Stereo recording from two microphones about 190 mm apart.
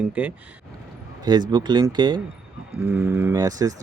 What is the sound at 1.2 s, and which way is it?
Speech, 20° right (ahead or behind).